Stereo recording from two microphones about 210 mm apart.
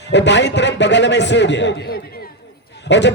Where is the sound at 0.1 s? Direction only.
55° left (ahead or behind).